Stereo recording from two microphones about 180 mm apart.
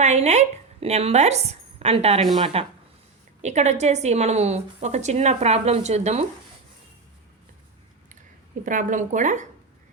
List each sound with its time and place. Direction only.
0.0 s a woman's voice: 40° right (ahead or behind)
8.6 s speech: 45° right (ahead or behind)